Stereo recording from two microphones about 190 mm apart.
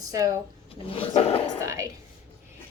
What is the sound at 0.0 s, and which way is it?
Speech, 20° right (ahead or behind).